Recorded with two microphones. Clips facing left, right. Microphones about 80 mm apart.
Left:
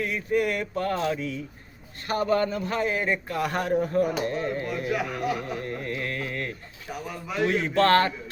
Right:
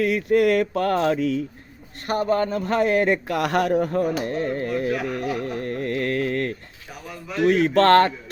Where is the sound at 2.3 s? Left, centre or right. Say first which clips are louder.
Right 2 dB; right.